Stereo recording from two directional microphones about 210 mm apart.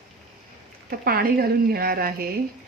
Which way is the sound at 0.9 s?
45° right (ahead or behind).